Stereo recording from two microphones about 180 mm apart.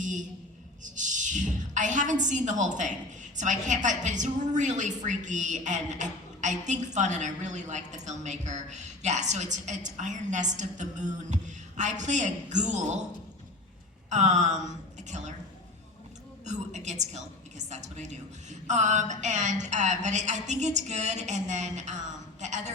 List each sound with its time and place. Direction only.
0.0 s a woman's voice: 45° right (ahead or behind)
14.1 s a woman's voice: 40° right (ahead or behind)
16.5 s a woman's voice: 40° right (ahead or behind)